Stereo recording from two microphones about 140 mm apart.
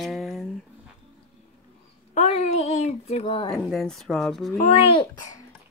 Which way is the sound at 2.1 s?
50° left (ahead or behind).